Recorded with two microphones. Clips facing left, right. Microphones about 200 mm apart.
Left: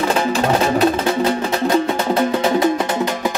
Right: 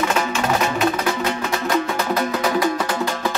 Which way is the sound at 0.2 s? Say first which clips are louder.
Left 4 dB; 35° left (ahead or behind).